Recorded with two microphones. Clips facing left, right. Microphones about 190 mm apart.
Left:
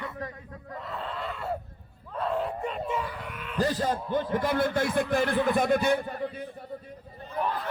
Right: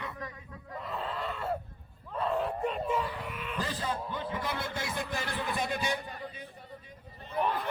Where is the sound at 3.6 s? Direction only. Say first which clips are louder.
Left 9 dB; 45° left (ahead or behind).